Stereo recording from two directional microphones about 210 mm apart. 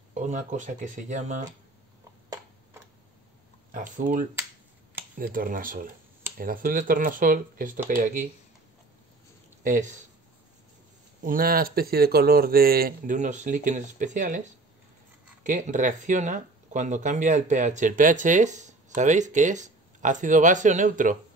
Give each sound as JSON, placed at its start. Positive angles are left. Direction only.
{"t": 0.1, "sound": "speech", "side_deg": -35}
{"t": 2.2, "sound": "tick-tock", "side_deg": -15}
{"t": 3.7, "sound": "speech", "side_deg": -40}
{"t": 9.6, "sound": "a sound", "side_deg": -40}
{"t": 11.2, "sound": "speech", "side_deg": -45}
{"t": 15.4, "sound": "speech", "side_deg": -40}